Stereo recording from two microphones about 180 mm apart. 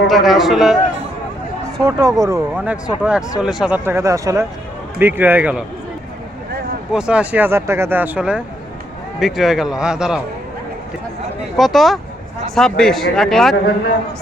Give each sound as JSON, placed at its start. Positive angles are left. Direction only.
{"t": 0.1, "sound": "a man's voice", "side_deg": 0}
{"t": 1.8, "sound": "speech", "side_deg": -20}
{"t": 2.6, "sound": "a man's voice", "side_deg": -5}
{"t": 3.8, "sound": "speech", "side_deg": -15}
{"t": 6.9, "sound": "a man's voice", "side_deg": -5}
{"t": 11.5, "sound": "a man's voice", "side_deg": 0}